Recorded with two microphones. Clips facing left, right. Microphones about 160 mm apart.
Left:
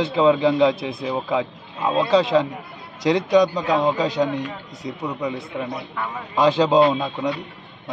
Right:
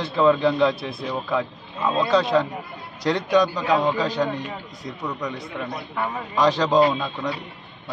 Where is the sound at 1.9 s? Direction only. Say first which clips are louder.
Left 2 dB; 30° left (ahead or behind).